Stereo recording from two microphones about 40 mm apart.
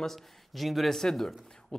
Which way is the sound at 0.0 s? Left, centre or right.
Centre.